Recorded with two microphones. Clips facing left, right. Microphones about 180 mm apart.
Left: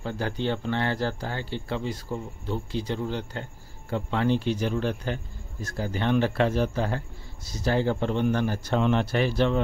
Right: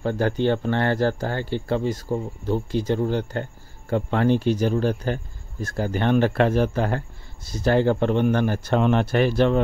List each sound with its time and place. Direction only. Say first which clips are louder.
0.0 s speech: right 7 dB; 55° right (ahead or behind)